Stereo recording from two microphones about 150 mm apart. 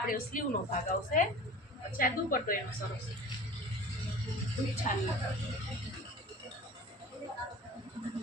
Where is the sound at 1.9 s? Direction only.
70° left (ahead or behind).